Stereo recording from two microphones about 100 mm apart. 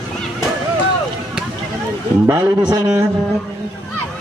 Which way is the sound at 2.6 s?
45° right (ahead or behind).